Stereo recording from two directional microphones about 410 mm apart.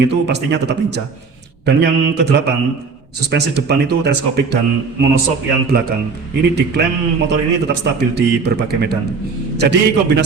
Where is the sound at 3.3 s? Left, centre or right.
Right.